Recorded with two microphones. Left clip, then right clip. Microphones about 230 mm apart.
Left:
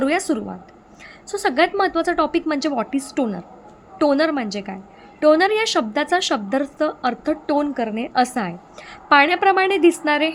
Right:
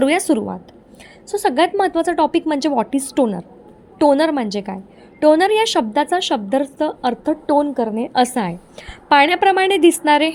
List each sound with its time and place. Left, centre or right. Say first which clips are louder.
0.0 s a woman's voice: right 4 dB; centre